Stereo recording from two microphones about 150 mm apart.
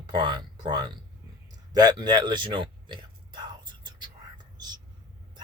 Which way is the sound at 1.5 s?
25° right (ahead or behind).